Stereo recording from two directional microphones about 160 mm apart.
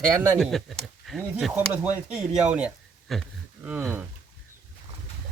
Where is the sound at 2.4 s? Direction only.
5° right (ahead or behind).